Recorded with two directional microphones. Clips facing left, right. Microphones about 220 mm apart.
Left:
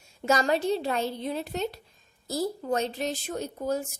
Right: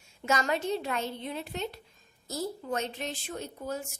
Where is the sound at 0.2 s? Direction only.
35° left (ahead or behind).